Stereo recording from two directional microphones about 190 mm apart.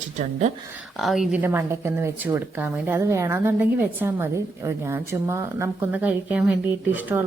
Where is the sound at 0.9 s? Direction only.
Centre (ahead or behind).